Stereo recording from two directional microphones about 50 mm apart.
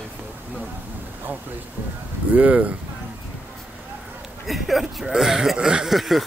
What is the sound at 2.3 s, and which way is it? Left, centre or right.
Speech, right.